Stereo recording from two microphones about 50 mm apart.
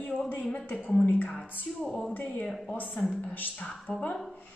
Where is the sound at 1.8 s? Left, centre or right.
Left.